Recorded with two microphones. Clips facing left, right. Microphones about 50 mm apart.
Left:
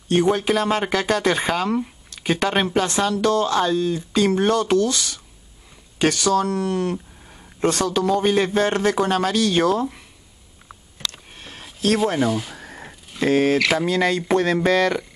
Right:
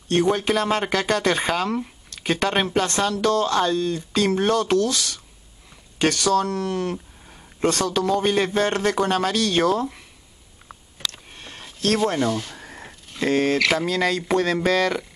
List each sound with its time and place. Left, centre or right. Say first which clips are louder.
0.1 s speech: left 2 dB; centre
11.1 s speech: left 1 dB; centre